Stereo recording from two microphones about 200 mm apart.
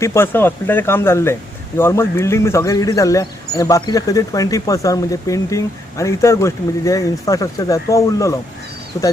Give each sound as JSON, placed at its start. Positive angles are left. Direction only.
{"t": 0.0, "sound": "speech", "side_deg": 15}